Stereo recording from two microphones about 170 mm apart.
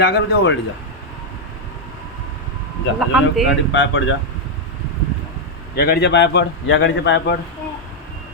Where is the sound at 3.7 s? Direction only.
90° left.